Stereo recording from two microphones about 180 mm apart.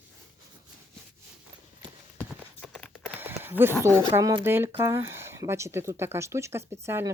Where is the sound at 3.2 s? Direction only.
10° right (ahead or behind).